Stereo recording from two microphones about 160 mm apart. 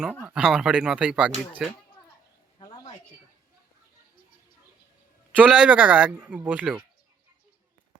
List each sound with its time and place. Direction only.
0.0 s speech: 10° right (ahead or behind)
2.6 s a sound: 30° left (ahead or behind)
5.4 s speech: 5° right (ahead or behind)